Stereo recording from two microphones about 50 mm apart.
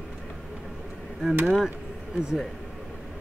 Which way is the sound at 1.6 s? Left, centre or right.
Right.